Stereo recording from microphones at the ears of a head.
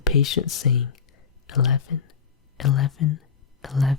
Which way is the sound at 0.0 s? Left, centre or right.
Left.